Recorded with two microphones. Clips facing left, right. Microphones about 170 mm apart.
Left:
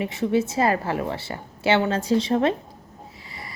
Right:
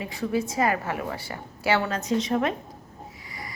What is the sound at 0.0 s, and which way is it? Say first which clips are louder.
A woman's voice: left 5 dB; 25° left (ahead or behind).